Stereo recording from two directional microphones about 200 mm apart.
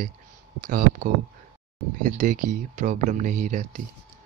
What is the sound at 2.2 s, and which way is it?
Speech, 40° right (ahead or behind).